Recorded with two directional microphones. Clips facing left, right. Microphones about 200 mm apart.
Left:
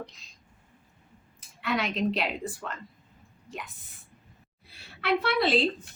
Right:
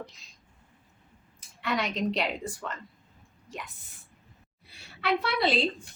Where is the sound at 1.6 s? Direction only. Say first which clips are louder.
Left 1 dB; centre (ahead or behind).